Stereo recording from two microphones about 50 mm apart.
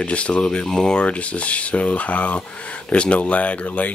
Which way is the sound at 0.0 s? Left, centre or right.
Left.